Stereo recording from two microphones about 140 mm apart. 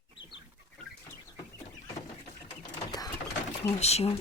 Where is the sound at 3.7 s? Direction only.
50° left (ahead or behind).